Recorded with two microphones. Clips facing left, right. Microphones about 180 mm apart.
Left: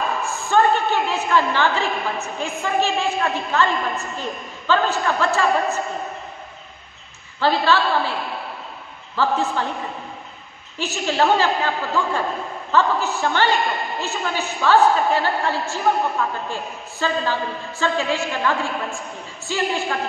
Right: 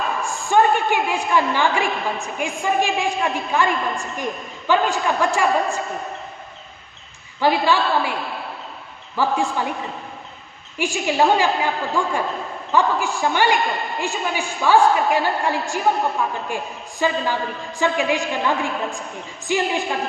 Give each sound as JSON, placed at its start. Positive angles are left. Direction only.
{"t": 0.2, "sound": "a woman's voice", "side_deg": -15}
{"t": 7.3, "sound": "a woman's voice", "side_deg": -15}
{"t": 9.1, "sound": "a woman's voice", "side_deg": -15}
{"t": 10.8, "sound": "a woman's voice", "side_deg": -15}